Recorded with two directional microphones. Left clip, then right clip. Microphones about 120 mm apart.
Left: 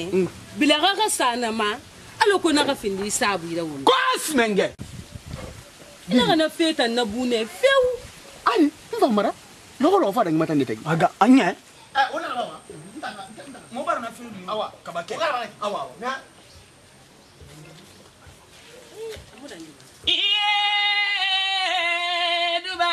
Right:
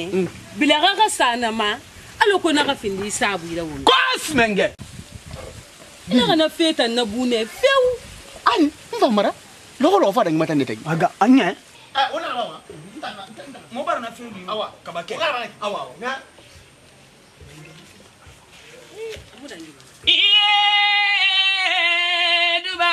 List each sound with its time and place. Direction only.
0.6 s a woman's voice: 10° left (ahead or behind)
3.8 s speech: 5° right (ahead or behind)
6.0 s speech: centre (ahead or behind)
8.5 s a sound: 5° right (ahead or behind)
9.8 s speech: 5° right (ahead or behind)
10.8 s speech: 25° left (ahead or behind)
11.9 s a sound: centre (ahead or behind)
13.7 s speech: 5° left (ahead or behind)
19.0 s a sound: centre (ahead or behind)
20.1 s singing: 5° left (ahead or behind)